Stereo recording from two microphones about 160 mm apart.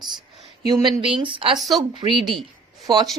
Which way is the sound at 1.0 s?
35° right (ahead or behind).